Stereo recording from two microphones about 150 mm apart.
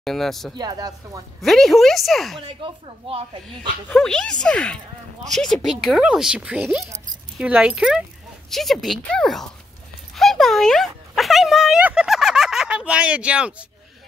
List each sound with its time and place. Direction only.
0.0 s speech: centre (ahead or behind)
0.6 s speech: 25° right (ahead or behind)
1.4 s speech: centre (ahead or behind)
2.4 s speech: 35° right (ahead or behind)
3.9 s speech: 5° left (ahead or behind)
10.1 s a sound: centre (ahead or behind)